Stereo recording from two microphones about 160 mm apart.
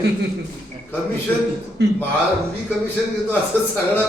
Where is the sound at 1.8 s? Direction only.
90° right.